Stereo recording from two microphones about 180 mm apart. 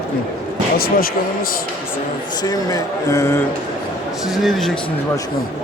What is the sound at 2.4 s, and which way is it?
Speech, 20° left (ahead or behind).